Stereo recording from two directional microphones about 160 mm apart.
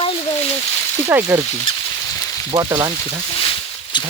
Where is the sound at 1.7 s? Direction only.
35° left (ahead or behind).